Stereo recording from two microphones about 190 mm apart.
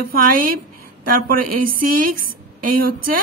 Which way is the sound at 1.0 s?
50° right (ahead or behind).